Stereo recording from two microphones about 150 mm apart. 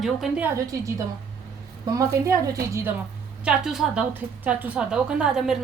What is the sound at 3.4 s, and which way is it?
A woman's voice, 5° right (ahead or behind).